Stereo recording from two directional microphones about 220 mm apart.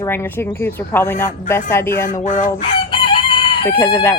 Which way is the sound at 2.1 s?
35° left (ahead or behind).